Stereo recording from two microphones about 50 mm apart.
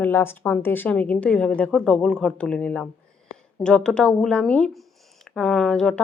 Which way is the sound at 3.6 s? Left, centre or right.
Centre.